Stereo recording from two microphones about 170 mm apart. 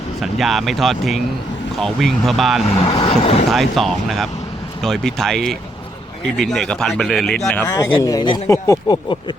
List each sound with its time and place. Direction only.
0.2 s speech: centre (ahead or behind)
2.6 s speech: 35° left (ahead or behind)
3.5 s speech: centre (ahead or behind); by 9.3 s 25° left (ahead or behind)